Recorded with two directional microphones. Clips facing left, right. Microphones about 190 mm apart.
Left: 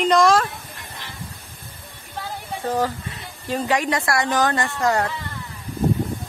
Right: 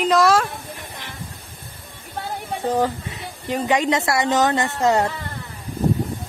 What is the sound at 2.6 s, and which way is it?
Speech, 20° right (ahead or behind).